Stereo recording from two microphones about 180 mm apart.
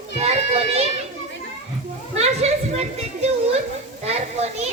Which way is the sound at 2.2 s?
35° right (ahead or behind).